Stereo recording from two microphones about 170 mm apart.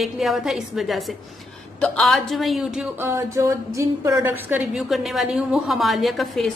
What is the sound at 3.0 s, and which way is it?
A woman's voice, 15° right (ahead or behind).